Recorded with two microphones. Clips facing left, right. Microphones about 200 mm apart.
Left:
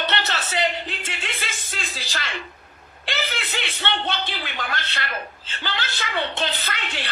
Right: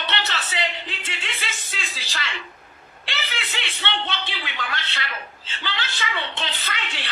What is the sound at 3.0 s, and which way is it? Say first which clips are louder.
A man's voice: left 4 dB; 45° left (ahead or behind).